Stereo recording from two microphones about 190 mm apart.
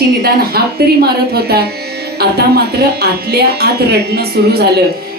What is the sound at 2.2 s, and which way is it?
Speech, 55° right (ahead or behind).